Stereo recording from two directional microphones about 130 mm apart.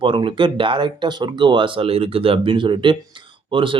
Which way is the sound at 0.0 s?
40° right (ahead or behind).